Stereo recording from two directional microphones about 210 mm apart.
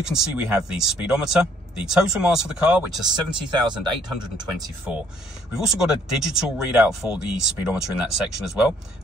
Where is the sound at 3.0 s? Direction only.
20° right (ahead or behind).